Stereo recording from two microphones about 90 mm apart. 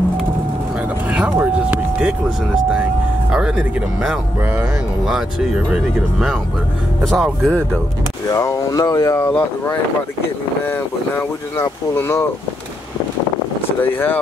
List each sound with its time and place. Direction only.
1.1 s vehicle: 15° right (ahead or behind)
3.3 s speech: 10° right (ahead or behind)
5.7 s speech: 5° right (ahead or behind)
7.0 s speech: 5° left (ahead or behind)
8.3 s speech: 40° left (ahead or behind)
9.3 s speech: 20° left (ahead or behind)
13.9 s speech: 20° left (ahead or behind)